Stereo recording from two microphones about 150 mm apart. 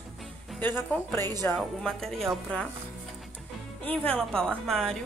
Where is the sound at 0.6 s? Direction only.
15° left (ahead or behind).